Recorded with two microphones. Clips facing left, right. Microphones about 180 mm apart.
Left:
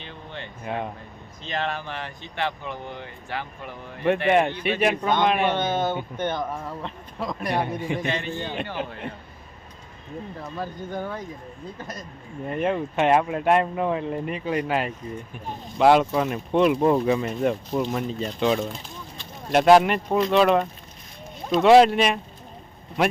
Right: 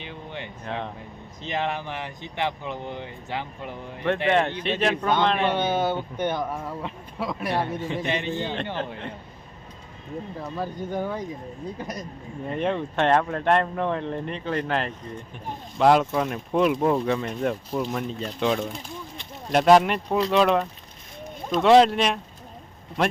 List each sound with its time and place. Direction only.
0.0 s speech: 15° right (ahead or behind)
0.6 s speech: 10° left (ahead or behind)
1.4 s speech: 15° right (ahead or behind)
4.3 s speech: 10° left (ahead or behind)
5.5 s speech: 10° right (ahead or behind)
7.5 s speech: 15° left (ahead or behind)
7.9 s a man's voice: 15° right (ahead or behind)
10.6 s speech: 10° right (ahead or behind)
12.5 s speech: 5° left (ahead or behind)